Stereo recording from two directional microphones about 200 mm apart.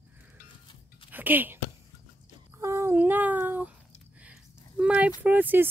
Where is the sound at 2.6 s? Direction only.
15° right (ahead or behind).